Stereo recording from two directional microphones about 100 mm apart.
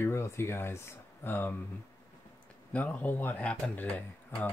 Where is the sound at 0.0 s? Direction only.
25° left (ahead or behind).